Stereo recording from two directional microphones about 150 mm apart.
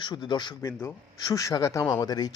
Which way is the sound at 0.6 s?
15° left (ahead or behind).